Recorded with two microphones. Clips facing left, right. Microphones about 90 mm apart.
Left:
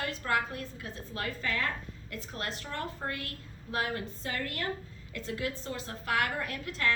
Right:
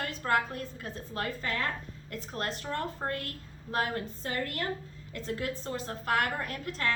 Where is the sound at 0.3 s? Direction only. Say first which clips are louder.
Right 3 dB; 45° right (ahead or behind).